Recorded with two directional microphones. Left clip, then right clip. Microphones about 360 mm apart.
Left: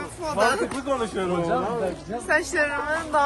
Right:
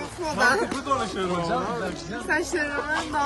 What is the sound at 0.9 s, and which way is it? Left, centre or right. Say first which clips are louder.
Speech: even; left.